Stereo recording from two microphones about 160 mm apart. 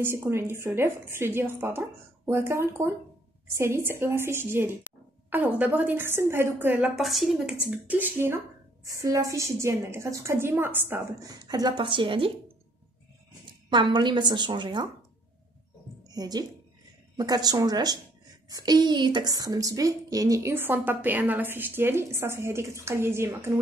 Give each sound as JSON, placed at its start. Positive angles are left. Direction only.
{"t": 0.0, "sound": "a woman's voice", "side_deg": -15}
{"t": 7.0, "sound": "a woman's voice", "side_deg": 0}
{"t": 13.7, "sound": "a woman's voice", "side_deg": -30}
{"t": 16.0, "sound": "a sound", "side_deg": -25}
{"t": 17.2, "sound": "a woman's voice", "side_deg": -25}